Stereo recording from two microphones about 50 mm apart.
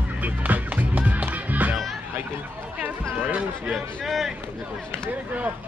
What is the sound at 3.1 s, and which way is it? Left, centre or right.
Music, right.